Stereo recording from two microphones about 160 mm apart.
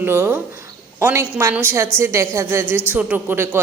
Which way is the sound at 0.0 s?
15° right (ahead or behind).